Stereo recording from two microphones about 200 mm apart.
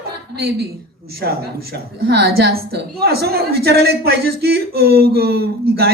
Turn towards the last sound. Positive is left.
turn(degrees=-50)  # may be behind; listen again after turning